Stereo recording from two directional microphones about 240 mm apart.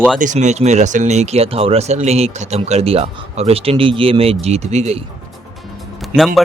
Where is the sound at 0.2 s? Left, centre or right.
Right.